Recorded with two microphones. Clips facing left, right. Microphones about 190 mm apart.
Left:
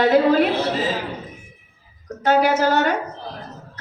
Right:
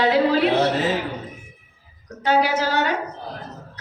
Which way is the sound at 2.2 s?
45° left (ahead or behind).